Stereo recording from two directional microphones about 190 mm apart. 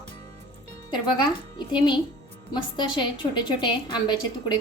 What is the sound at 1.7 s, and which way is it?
Speech, 25° left (ahead or behind).